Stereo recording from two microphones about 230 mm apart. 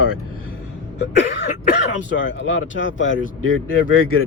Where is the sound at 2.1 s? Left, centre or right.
Left.